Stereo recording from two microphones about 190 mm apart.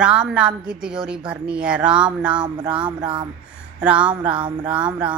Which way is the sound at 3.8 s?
5° right (ahead or behind).